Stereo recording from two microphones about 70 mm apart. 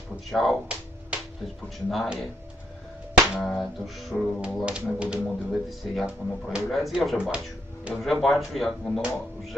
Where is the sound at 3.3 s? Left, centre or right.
Centre.